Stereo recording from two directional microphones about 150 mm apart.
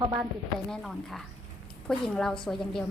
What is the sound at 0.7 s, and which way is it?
A woman's voice, centre (ahead or behind).